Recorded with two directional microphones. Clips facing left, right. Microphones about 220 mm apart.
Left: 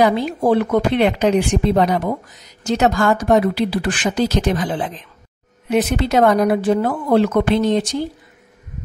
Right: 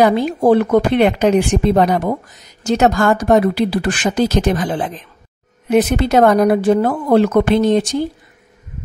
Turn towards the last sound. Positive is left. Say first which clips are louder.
# right 3 dB
turn(degrees=-50)  # may be behind; listen again after turning